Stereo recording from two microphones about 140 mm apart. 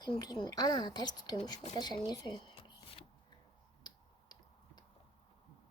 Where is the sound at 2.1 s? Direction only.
35° left (ahead or behind).